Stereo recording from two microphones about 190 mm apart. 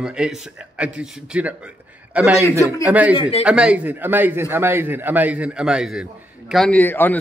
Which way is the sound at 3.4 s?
5° right (ahead or behind).